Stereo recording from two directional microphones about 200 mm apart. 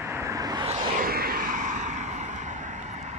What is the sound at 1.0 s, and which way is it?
Vehicle, 50° right (ahead or behind).